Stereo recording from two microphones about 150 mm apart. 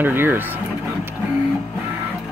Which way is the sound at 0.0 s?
15° right (ahead or behind).